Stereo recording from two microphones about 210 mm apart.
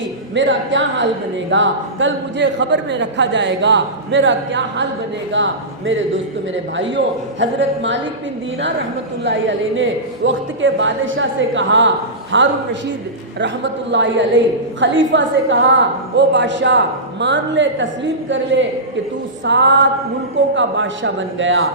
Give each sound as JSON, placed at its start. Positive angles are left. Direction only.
{"t": 0.3, "sound": "a man's voice", "side_deg": -60}
{"t": 9.2, "sound": "a man's voice", "side_deg": -60}